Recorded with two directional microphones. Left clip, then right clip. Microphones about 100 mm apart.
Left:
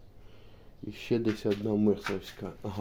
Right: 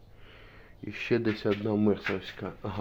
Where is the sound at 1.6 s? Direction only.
25° left (ahead or behind).